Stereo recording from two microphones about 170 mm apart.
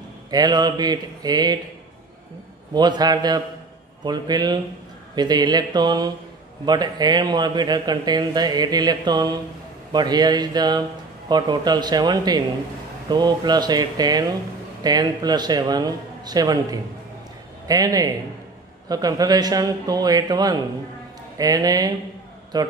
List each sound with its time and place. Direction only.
0.3 s a man's voice: 25° right (ahead or behind)
2.7 s a man's voice: 25° right (ahead or behind)